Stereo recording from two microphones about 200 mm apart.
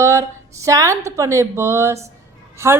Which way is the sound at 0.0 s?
15° right (ahead or behind).